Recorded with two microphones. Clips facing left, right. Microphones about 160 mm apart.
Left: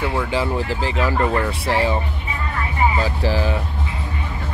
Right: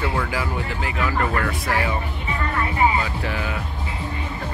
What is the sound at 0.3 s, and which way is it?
Speech, 30° left (ahead or behind).